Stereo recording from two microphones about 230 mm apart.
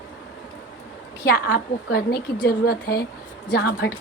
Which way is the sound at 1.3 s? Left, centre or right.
Left.